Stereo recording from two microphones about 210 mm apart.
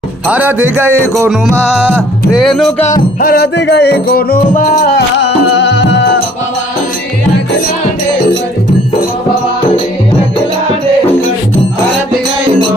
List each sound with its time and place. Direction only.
0.3 s speech: 10° right (ahead or behind)
0.9 s music: 10° left (ahead or behind)
1.8 s music: 5° right (ahead or behind)
2.8 s music: 40° left (ahead or behind)
5.1 s music: 55° left (ahead or behind)